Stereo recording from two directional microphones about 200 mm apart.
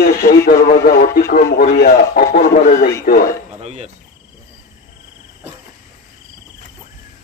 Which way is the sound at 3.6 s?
35° right (ahead or behind).